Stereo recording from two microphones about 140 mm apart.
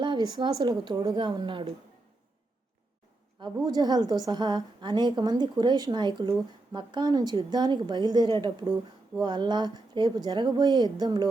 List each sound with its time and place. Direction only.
0.0 s a woman's voice: 30° right (ahead or behind)
3.7 s a woman's voice: 30° right (ahead or behind)